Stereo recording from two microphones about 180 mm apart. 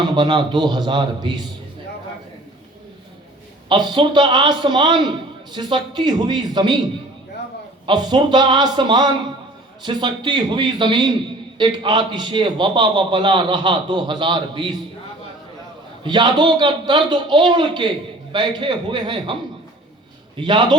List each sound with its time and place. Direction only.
0.0 s a man's voice: 25° right (ahead or behind)
3.7 s a man's voice: 25° right (ahead or behind)
7.9 s a man's voice: 25° right (ahead or behind)
16.0 s a man's voice: 25° right (ahead or behind)